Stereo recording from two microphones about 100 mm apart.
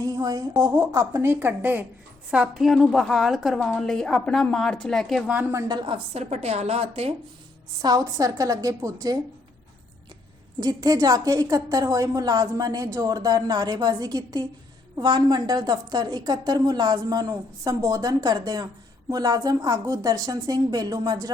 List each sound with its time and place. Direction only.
0.0 s a woman's voice: 35° right (ahead or behind); by 1.8 s 20° right (ahead or behind)
2.3 s a woman's voice: 5° right (ahead or behind)
5.6 s a woman's voice: 45° right (ahead or behind)
5.9 s a woman's voice: 90° right
7.8 s a woman's voice: 40° right (ahead or behind)
10.6 s a woman's voice: 40° right (ahead or behind)